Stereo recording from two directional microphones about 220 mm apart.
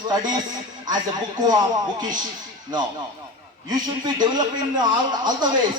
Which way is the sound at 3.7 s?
20° right (ahead or behind).